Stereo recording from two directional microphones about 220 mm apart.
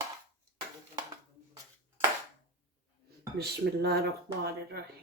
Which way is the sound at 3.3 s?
45° right (ahead or behind).